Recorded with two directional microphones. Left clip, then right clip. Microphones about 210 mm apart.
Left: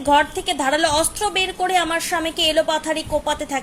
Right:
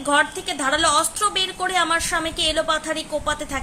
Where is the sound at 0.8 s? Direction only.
40° right (ahead or behind).